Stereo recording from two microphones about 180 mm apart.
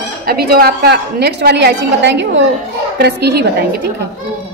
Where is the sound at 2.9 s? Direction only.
65° right (ahead or behind).